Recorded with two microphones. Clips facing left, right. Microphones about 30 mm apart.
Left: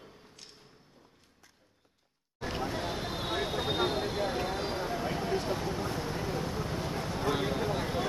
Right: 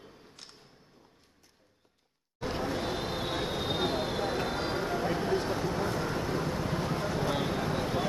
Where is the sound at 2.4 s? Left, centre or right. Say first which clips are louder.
Right 2 dB; centre.